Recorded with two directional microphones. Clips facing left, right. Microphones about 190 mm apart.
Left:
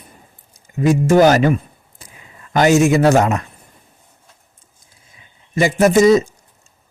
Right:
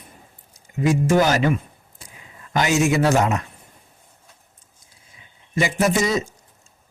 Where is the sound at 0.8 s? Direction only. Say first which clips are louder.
Left 6 dB; 45° left (ahead or behind).